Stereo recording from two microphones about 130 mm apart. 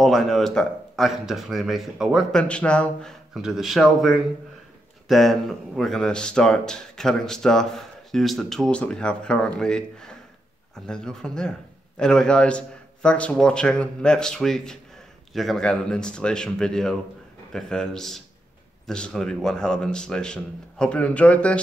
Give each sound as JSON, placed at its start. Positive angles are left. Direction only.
{"t": 0.0, "sound": "speech", "side_deg": 0}
{"t": 2.4, "sound": "a man's voice", "side_deg": 10}